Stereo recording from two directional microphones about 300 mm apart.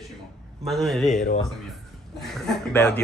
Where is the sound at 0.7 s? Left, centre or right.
Centre.